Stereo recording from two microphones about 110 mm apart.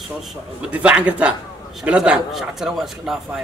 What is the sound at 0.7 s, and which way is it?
A man's voice, 10° right (ahead or behind).